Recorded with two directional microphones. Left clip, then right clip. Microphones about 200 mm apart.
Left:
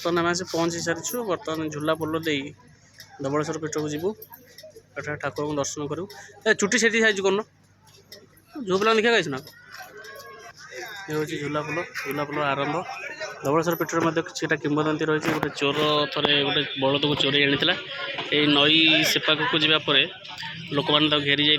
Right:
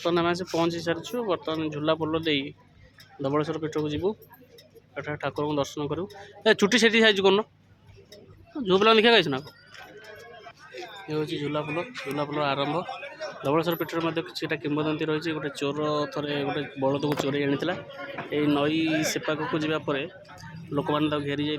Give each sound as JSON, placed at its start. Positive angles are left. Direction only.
{"t": 0.0, "sound": "speech", "side_deg": -5}
{"t": 8.6, "sound": "speech", "side_deg": -20}
{"t": 11.1, "sound": "speech", "side_deg": -5}
{"t": 12.8, "sound": "a sound", "side_deg": -60}
{"t": 13.4, "sound": "speech", "side_deg": 0}